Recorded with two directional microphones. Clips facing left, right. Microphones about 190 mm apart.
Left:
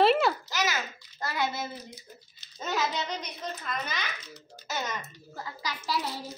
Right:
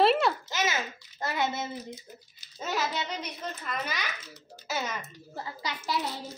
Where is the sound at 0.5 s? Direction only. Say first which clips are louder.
Even; 25° right (ahead or behind).